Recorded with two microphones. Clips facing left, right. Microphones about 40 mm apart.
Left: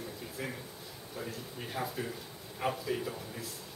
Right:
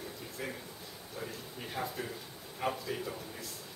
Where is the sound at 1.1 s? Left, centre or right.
Centre.